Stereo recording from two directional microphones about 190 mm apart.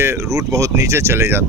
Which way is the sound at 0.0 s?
15° right (ahead or behind).